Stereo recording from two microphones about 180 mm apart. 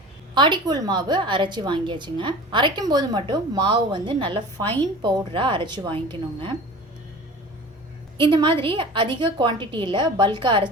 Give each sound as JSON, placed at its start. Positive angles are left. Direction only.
{"t": 0.3, "sound": "a woman's voice", "side_deg": -25}
{"t": 8.2, "sound": "a woman's voice", "side_deg": -25}